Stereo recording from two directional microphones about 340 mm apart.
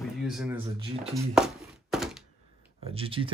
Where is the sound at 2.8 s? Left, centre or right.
Centre.